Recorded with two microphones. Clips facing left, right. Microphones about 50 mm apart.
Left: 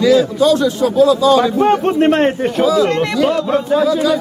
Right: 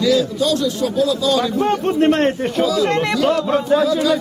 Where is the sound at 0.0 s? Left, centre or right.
Centre.